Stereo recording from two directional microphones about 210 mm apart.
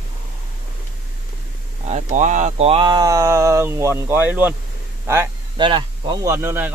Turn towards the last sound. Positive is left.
turn(degrees=-10)  # may be behind; listen again after turning